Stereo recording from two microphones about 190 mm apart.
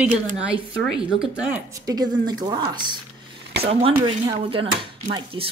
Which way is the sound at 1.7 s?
20° right (ahead or behind).